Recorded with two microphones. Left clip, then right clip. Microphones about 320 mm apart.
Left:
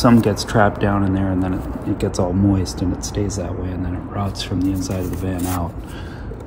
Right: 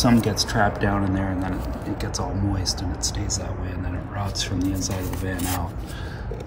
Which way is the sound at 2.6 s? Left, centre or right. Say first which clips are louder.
Left 3 dB; centre.